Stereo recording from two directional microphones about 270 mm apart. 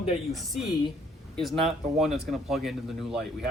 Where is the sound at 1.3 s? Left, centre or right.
Centre.